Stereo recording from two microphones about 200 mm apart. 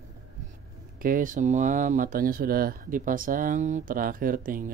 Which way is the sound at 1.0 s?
40° right (ahead or behind).